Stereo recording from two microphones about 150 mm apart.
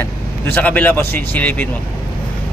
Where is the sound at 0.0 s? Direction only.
10° left (ahead or behind).